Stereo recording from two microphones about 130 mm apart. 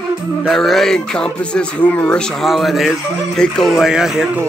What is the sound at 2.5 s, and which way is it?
Speech, centre (ahead or behind).